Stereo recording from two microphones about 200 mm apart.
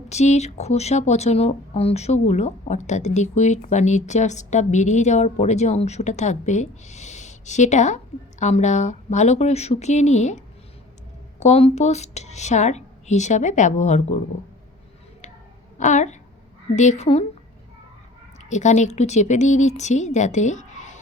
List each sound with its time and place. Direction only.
0.1 s speech: 35° left (ahead or behind)
15.8 s speech: 35° left (ahead or behind)
18.4 s speech: 35° left (ahead or behind)